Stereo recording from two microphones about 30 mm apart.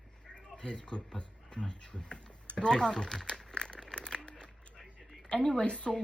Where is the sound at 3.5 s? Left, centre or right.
Left.